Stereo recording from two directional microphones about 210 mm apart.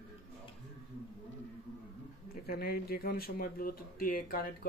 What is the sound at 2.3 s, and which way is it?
Speech, 45° left (ahead or behind).